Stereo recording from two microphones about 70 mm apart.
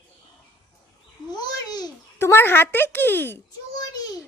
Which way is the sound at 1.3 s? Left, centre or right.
Left.